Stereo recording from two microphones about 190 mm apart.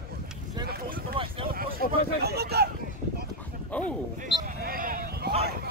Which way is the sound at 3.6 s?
5° left (ahead or behind).